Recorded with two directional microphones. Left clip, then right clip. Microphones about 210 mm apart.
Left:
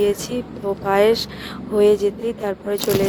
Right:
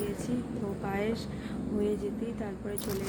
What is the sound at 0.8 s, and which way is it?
Speech, 50° left (ahead or behind).